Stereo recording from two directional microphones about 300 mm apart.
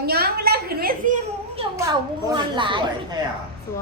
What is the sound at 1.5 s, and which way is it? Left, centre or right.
Speech, centre.